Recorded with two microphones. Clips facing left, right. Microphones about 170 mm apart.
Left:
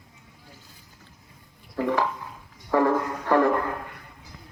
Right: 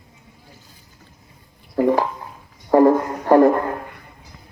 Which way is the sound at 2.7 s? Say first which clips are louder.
Right 8 dB; 35° right (ahead or behind).